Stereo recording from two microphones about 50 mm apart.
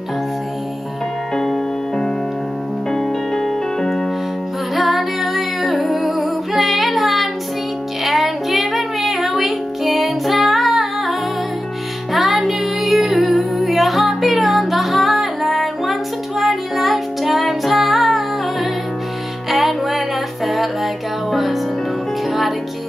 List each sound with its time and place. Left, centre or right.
1.3 s music: centre
4.7 s humming: centre
8.0 s music: centre